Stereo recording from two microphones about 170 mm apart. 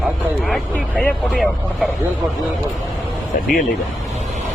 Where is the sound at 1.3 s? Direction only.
5° right (ahead or behind).